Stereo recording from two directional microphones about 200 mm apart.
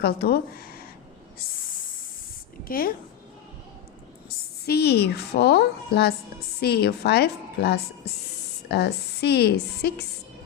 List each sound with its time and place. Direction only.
0.0 s speech: 50° left (ahead or behind)
2.6 s a woman's voice: 45° left (ahead or behind)
4.6 s a woman's voice: 55° left (ahead or behind)